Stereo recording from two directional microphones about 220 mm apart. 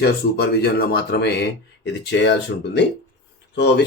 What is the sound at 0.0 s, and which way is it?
Speech, 45° left (ahead or behind).